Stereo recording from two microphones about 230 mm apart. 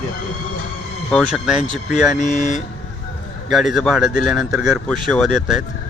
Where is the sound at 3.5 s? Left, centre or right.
Centre.